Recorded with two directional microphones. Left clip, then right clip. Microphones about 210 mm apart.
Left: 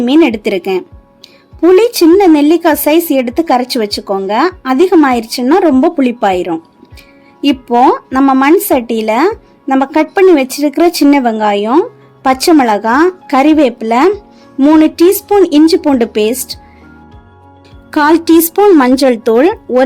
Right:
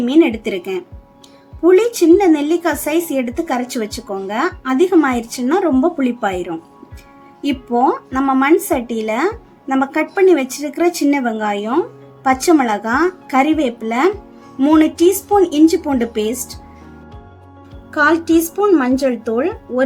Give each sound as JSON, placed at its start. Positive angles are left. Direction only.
{"t": 0.0, "sound": "speech", "side_deg": 40}
{"t": 17.9, "sound": "speech", "side_deg": 45}